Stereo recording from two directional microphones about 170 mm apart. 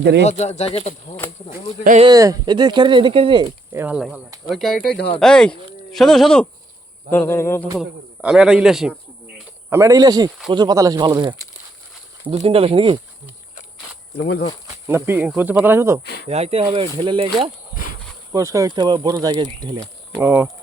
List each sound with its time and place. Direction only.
0.3 s speech: 40° left (ahead or behind)
2.0 s speech: 25° right (ahead or behind)
3.7 s speech: 10° right (ahead or behind)
7.1 s a sound: 15° left (ahead or behind)
7.8 s speech: 5° right (ahead or behind)
9.6 s speech: 15° right (ahead or behind)
14.2 s speech: 70° left (ahead or behind)
14.8 s speech: 15° right (ahead or behind)
16.2 s speech: 40° right (ahead or behind)
18.3 s speech: 15° right (ahead or behind)
20.2 s speech: 10° right (ahead or behind)